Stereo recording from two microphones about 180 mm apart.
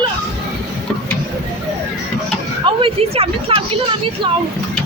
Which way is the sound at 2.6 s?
30° right (ahead or behind).